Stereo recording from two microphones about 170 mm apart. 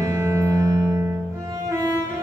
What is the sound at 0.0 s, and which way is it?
Music, 15° right (ahead or behind).